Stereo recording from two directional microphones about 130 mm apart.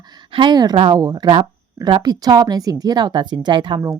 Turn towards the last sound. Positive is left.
turn(degrees=-35)  # may be behind; listen again after turning